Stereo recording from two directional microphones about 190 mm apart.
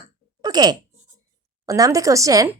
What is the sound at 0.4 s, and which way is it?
A woman's voice, 20° right (ahead or behind).